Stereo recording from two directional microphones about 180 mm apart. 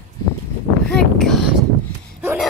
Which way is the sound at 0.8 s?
Centre (ahead or behind).